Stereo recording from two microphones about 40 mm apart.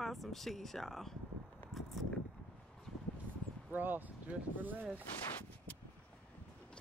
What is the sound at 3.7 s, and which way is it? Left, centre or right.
Speech, right.